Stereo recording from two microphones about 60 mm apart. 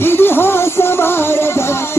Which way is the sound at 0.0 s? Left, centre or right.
Left.